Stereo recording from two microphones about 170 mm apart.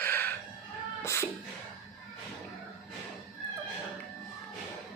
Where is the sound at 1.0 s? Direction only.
15° left (ahead or behind).